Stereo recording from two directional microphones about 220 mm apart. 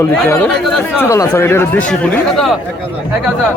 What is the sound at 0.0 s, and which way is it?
A man's voice, 10° left (ahead or behind).